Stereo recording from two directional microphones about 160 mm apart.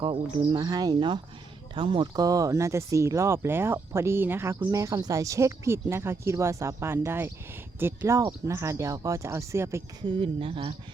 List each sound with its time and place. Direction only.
0.0 s speech: 30° right (ahead or behind)
10.1 s speech: 35° right (ahead or behind)